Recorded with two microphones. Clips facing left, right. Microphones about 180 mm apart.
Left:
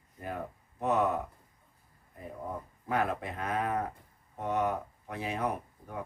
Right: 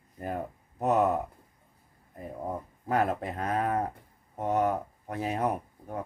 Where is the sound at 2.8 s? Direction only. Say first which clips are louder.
Right 4 dB; 40° right (ahead or behind).